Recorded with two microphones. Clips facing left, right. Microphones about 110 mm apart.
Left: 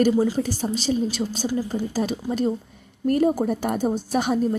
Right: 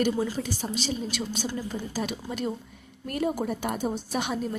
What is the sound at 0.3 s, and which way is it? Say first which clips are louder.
A woman's voice: left 6 dB; 40° left (ahead or behind).